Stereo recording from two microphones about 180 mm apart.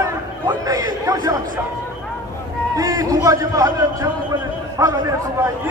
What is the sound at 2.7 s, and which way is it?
A man's voice, 20° right (ahead or behind).